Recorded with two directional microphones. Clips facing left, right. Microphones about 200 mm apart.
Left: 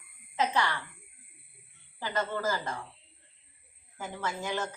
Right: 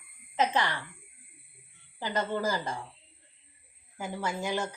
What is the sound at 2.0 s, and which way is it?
Speech, 15° right (ahead or behind).